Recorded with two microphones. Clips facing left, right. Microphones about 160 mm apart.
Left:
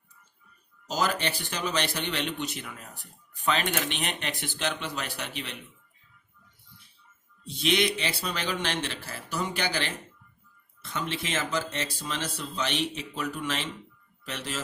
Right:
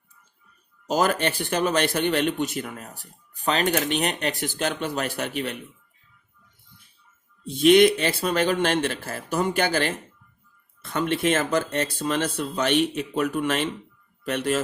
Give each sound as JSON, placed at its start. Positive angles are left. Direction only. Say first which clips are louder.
{"t": 0.9, "sound": "speech", "louder": "right 6 dB", "side_deg": -55}
{"t": 7.4, "sound": "speech", "louder": "right 11 dB", "side_deg": -50}